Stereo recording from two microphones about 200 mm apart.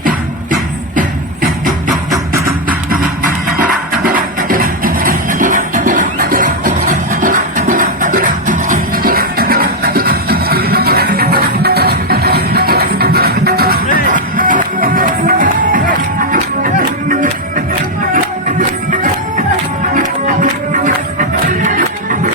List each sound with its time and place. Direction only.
0.9 s music: 40° right (ahead or behind)
4.1 s music: 45° right (ahead or behind)
18.9 s music: 40° right (ahead or behind)